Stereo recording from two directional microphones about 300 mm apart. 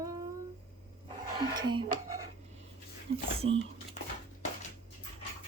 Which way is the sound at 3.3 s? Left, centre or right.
Centre.